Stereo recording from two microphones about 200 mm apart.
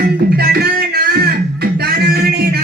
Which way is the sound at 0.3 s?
50° right (ahead or behind).